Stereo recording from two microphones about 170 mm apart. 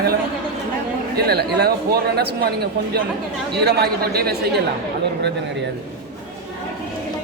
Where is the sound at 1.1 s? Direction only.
70° right (ahead or behind).